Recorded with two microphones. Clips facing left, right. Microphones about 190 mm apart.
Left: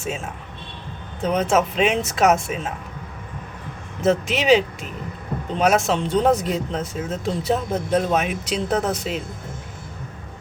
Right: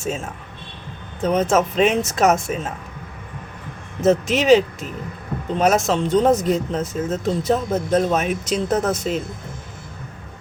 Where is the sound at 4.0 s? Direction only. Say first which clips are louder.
Right 3 dB; 45° right (ahead or behind).